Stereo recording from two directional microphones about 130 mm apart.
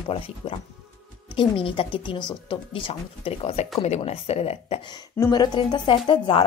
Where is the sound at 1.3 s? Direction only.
40° left (ahead or behind).